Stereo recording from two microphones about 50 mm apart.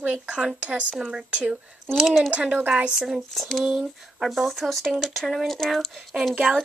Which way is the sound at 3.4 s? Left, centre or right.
Centre.